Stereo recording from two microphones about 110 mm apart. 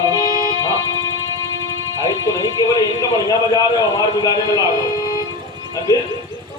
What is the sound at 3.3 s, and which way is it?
A man's voice, 35° left (ahead or behind).